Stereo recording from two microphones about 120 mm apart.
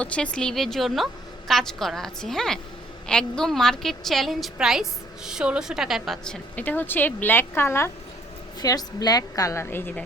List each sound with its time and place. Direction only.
0.0 s a woman's voice: 10° left (ahead or behind)
8.6 s a woman's voice: 35° left (ahead or behind); by 10.0 s 15° left (ahead or behind)